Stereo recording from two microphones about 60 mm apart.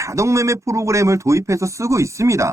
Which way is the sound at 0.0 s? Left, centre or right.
Right.